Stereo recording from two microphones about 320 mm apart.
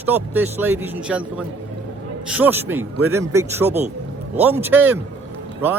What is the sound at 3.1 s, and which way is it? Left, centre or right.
A man's voice, centre.